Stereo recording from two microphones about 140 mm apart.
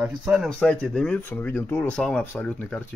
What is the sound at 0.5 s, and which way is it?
Speech, 10° left (ahead or behind).